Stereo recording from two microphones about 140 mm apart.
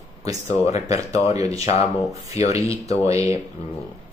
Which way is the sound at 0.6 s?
50° left (ahead or behind).